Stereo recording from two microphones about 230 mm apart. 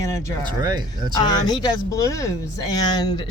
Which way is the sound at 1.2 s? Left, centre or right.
Centre.